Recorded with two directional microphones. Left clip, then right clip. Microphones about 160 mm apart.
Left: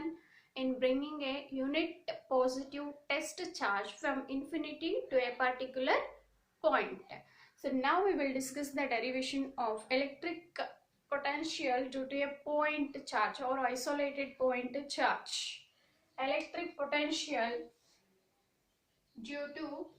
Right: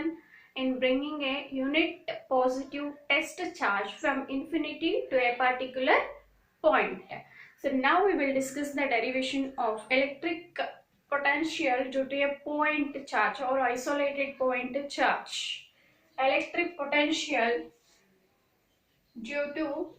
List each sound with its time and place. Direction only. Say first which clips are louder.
0.5 s a woman's voice: right 5 dB; 15° left (ahead or behind)
16.1 s a woman's voice: right 9 dB; 20° left (ahead or behind)
19.2 s speech: right 10 dB; centre (ahead or behind)